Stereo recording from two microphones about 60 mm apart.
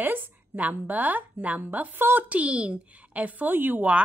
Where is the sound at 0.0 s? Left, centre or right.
Right.